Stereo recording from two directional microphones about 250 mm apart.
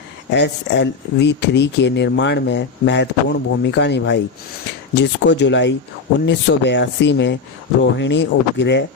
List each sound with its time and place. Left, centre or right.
0.3 s speech: left